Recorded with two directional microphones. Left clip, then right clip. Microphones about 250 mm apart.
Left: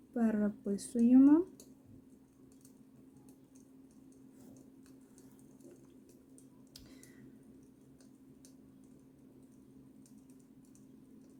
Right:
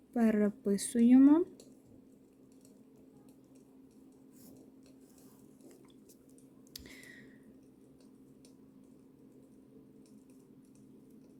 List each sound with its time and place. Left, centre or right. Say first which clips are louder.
0.1 s speech: right 4 dB; right